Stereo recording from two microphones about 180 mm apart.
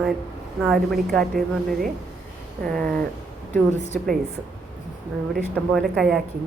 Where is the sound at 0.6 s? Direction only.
Centre (ahead or behind).